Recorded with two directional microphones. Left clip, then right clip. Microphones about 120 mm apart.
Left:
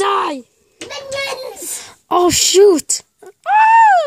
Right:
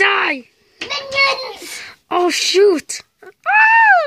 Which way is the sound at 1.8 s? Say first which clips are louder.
Left 3 dB; 35° left (ahead or behind).